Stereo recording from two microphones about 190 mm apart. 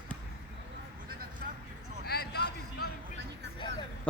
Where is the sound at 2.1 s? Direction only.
55° left (ahead or behind).